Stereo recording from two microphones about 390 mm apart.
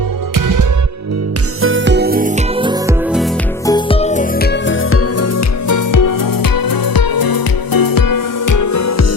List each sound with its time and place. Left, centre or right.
0.3 s music: right
1.6 s music: right; by 3.2 s centre
3.7 s music: centre; by 9.0 s left